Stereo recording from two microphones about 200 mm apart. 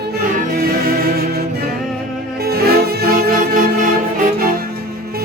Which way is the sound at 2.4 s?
50° right (ahead or behind).